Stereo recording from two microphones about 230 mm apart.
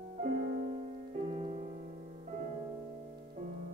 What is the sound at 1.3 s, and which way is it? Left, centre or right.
Music, right.